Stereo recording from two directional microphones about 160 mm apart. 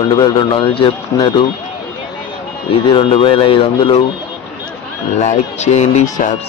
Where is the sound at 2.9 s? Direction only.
35° left (ahead or behind).